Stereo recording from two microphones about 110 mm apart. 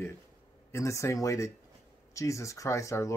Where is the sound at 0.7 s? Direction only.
25° left (ahead or behind).